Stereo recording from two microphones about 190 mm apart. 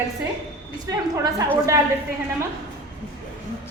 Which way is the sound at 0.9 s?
20° right (ahead or behind).